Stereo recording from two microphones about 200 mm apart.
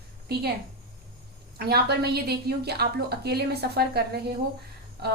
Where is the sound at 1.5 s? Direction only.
50° right (ahead or behind).